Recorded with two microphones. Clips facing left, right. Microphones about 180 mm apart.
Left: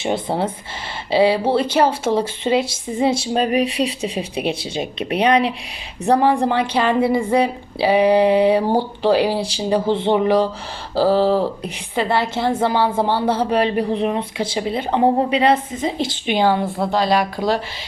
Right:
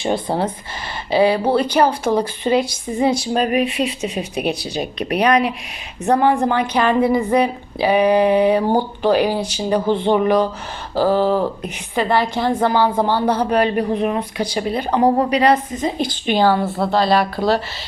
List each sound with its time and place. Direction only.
0.0 s a woman's voice: 25° left (ahead or behind)